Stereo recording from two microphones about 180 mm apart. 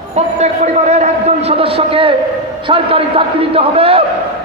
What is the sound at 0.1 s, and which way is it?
A man's voice, 40° right (ahead or behind).